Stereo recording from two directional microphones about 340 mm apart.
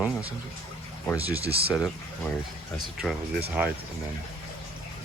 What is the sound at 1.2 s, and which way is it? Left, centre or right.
Speech, centre.